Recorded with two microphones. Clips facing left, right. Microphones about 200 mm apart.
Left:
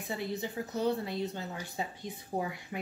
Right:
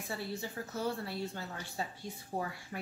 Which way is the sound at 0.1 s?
20° left (ahead or behind).